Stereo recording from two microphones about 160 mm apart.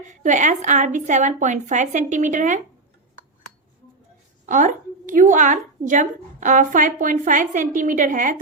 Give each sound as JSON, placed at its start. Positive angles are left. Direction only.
{"t": 0.1, "sound": "a woman's voice", "side_deg": -50}
{"t": 4.4, "sound": "a woman's voice", "side_deg": -50}